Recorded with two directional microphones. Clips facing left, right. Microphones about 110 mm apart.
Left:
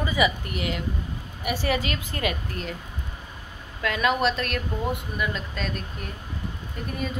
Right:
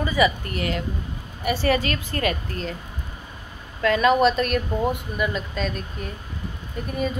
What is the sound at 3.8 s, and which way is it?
Speech, 5° left (ahead or behind).